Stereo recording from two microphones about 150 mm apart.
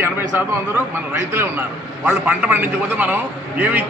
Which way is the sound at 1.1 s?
15° right (ahead or behind).